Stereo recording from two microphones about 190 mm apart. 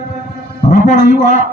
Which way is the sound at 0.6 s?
40° left (ahead or behind).